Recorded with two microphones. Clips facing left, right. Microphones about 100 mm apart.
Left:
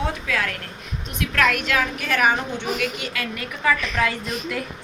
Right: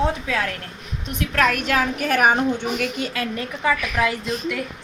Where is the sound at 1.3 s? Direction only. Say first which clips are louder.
Right 1 dB; 40° right (ahead or behind).